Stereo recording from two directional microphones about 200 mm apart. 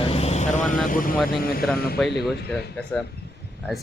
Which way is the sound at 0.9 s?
45° left (ahead or behind).